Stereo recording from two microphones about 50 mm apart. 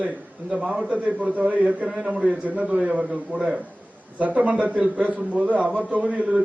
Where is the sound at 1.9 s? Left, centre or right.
Centre.